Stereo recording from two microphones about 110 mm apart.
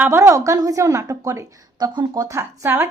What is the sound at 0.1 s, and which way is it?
A woman's voice, 25° right (ahead or behind).